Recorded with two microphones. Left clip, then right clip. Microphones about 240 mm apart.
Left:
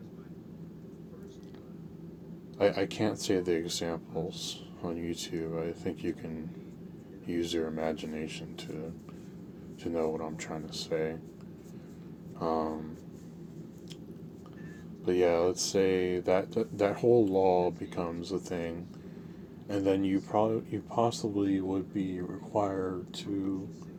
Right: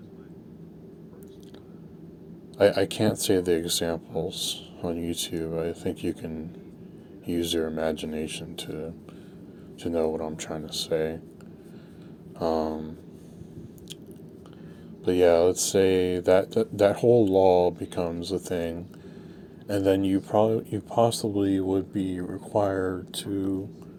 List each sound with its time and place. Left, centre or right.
2.6 s speech: right
12.4 s speech: right
15.0 s speech: right